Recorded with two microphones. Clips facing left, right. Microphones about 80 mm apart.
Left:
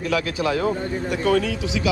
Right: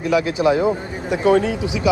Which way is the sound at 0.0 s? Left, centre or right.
Centre.